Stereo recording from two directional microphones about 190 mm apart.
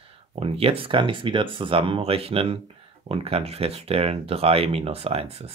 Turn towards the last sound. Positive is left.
turn(degrees=-30)  # may be behind; listen again after turning